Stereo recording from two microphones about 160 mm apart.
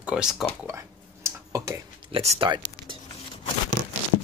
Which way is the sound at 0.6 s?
15° right (ahead or behind).